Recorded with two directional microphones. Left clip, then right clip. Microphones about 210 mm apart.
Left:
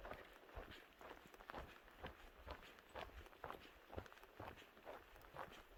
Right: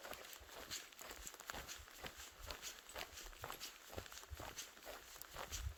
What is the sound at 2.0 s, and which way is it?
Walk, 60° right (ahead or behind).